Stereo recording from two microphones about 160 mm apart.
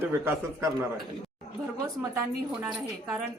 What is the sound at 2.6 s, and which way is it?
Speech, 15° right (ahead or behind).